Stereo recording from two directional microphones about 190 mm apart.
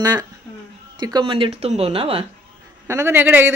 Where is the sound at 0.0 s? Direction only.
20° right (ahead or behind).